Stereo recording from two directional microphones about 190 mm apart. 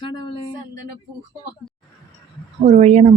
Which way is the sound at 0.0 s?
25° left (ahead or behind).